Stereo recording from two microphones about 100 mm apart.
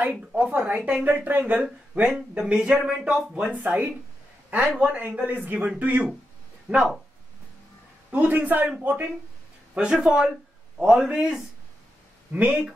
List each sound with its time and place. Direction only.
0.0 s speech: 15° right (ahead or behind)
8.1 s speech: 15° right (ahead or behind)